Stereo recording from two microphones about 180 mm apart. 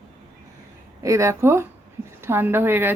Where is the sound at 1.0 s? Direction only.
15° right (ahead or behind).